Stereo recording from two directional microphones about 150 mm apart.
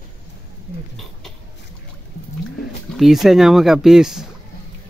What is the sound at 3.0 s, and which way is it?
A child's voice, centre (ahead or behind).